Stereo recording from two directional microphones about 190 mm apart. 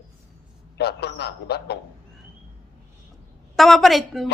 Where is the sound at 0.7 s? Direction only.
60° left (ahead or behind).